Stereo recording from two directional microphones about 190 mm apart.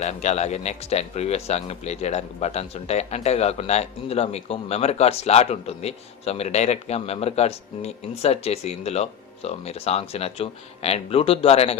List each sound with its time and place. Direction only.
0.0 s speech: 35° left (ahead or behind)